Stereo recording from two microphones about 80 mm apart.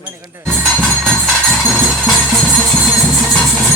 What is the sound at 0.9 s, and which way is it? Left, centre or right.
Music, centre.